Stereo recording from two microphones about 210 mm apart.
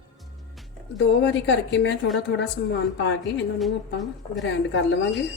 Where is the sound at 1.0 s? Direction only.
60° left (ahead or behind).